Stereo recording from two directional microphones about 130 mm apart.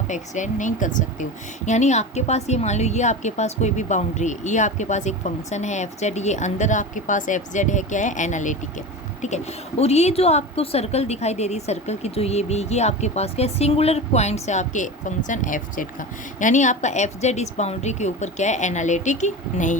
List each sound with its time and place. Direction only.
0.1 s speech: 70° left (ahead or behind)
9.2 s speech: 60° left (ahead or behind)
15.3 s speech: 80° left